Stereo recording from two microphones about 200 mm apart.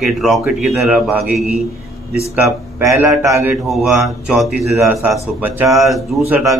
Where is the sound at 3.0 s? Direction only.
15° right (ahead or behind).